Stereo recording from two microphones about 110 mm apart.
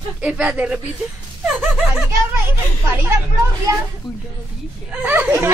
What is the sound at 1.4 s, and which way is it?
Gasp, 5° right (ahead or behind).